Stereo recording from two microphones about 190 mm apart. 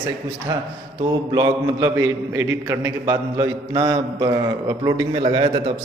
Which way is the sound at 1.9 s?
10° right (ahead or behind).